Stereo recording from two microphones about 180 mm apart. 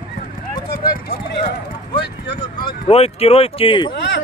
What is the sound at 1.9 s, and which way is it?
Speech, 25° left (ahead or behind).